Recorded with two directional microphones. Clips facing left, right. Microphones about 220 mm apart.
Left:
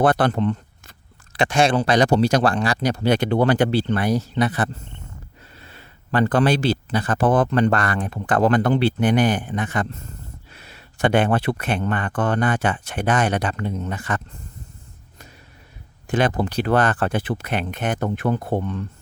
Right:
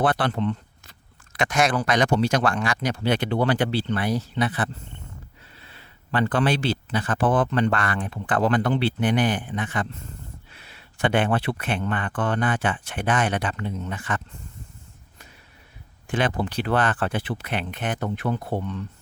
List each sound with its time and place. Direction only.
0.0 s speech: 45° left (ahead or behind)
1.3 s speech: 30° left (ahead or behind)
16.0 s speech: 40° left (ahead or behind)